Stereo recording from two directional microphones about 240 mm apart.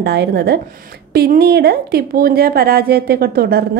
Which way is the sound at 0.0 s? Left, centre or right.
Right.